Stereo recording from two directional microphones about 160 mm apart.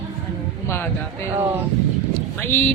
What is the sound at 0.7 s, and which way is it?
Speech, 15° left (ahead or behind).